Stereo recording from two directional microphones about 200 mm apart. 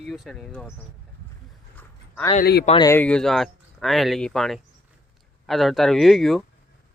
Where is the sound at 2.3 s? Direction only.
50° left (ahead or behind).